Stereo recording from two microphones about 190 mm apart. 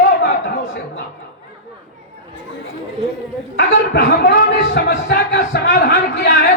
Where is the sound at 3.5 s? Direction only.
55° left (ahead or behind).